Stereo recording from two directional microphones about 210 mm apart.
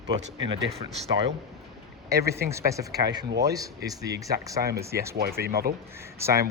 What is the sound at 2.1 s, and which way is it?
Speech, 15° right (ahead or behind).